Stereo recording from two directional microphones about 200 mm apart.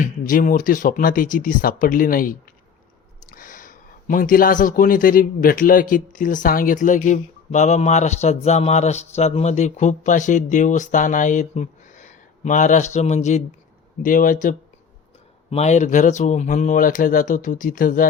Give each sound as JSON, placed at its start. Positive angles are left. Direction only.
{"t": 0.0, "sound": "speech", "side_deg": 40}